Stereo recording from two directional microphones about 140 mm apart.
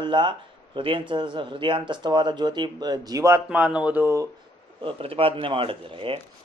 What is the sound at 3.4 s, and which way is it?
Speech, 5° right (ahead or behind).